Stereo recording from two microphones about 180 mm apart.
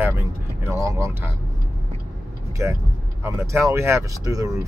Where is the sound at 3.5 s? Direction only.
15° right (ahead or behind).